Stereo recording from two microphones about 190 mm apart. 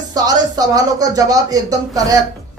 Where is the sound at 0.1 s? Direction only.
20° right (ahead or behind).